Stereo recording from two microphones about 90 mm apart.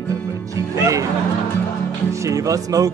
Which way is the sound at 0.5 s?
35° right (ahead or behind).